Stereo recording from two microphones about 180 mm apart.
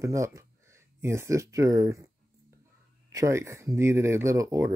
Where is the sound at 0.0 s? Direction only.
15° right (ahead or behind).